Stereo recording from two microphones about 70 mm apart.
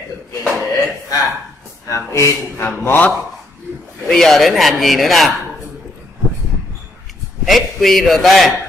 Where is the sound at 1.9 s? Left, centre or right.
Left.